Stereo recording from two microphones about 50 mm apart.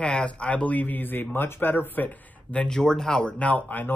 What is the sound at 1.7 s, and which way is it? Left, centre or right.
Speech, left.